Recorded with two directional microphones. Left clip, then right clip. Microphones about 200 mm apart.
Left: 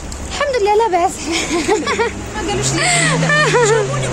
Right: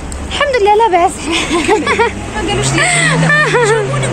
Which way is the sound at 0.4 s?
5° left (ahead or behind).